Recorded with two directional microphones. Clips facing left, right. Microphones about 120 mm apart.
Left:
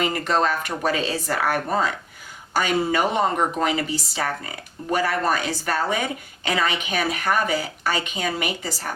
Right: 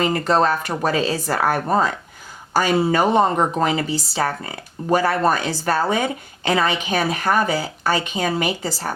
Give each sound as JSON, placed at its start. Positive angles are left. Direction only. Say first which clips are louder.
{"t": 0.0, "sound": "speech", "louder": "right 4 dB", "side_deg": -35}